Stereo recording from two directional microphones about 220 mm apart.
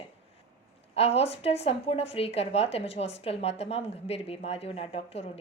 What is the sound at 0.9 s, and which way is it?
Speech, 30° left (ahead or behind).